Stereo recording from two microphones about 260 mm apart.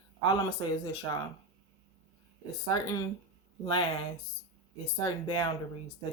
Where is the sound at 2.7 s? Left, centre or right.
Centre.